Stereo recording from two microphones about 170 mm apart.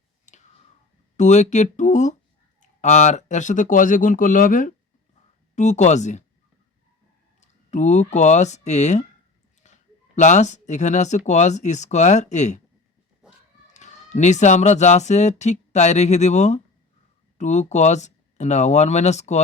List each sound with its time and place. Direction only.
1.1 s speech: 45° left (ahead or behind)
7.4 s speech: 45° left (ahead or behind)
13.7 s speech: 45° left (ahead or behind)